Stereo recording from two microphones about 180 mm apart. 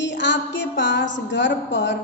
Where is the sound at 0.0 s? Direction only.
85° left.